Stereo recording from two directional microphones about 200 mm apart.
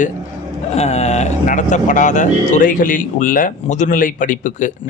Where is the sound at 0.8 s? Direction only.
35° left (ahead or behind).